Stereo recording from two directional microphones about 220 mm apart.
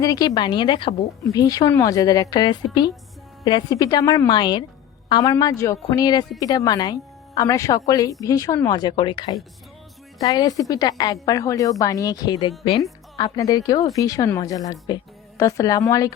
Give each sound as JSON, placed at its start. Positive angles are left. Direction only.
{"t": 0.0, "sound": "a woman's voice", "side_deg": 15}